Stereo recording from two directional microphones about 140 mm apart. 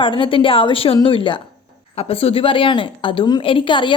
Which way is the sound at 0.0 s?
35° left (ahead or behind).